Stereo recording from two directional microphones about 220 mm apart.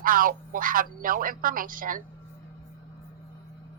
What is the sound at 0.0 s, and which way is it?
Speech, 40° right (ahead or behind).